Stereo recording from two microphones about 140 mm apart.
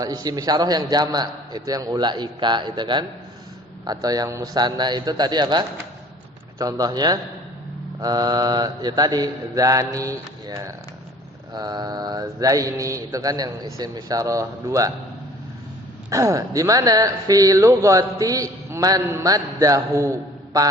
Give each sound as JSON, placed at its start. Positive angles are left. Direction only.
{"t": 0.0, "sound": "speech", "side_deg": -25}
{"t": 16.0, "sound": "speech", "side_deg": -25}